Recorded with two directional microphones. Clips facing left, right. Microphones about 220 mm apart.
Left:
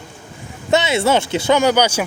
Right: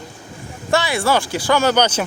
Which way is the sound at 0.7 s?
20° left (ahead or behind).